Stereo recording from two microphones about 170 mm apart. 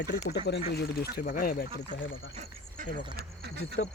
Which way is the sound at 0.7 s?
65° left (ahead or behind).